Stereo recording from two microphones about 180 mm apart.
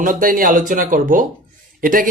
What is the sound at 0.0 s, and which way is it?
Speech, 50° right (ahead or behind).